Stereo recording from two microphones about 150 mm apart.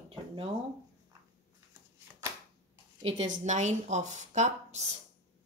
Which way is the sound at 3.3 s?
50° right (ahead or behind).